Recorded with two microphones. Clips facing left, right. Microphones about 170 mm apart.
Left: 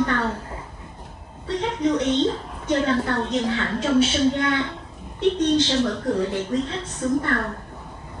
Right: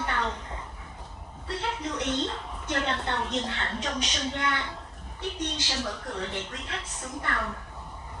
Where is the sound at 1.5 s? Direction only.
30° left (ahead or behind).